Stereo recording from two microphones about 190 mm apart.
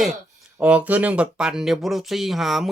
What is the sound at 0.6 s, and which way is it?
Speech, 5° right (ahead or behind).